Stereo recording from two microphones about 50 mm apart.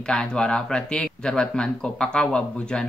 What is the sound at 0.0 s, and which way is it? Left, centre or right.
Speech, centre.